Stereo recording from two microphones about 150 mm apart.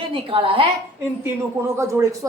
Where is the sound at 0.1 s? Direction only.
35° right (ahead or behind).